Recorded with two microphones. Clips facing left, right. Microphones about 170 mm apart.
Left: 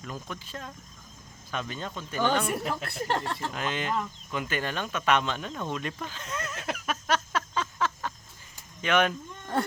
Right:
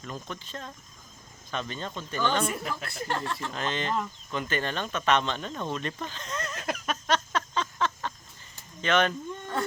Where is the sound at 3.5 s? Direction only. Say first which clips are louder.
Right 1 dB; 10° left (ahead or behind).